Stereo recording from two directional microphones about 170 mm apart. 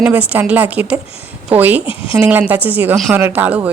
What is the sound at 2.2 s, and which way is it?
Speech, 10° right (ahead or behind).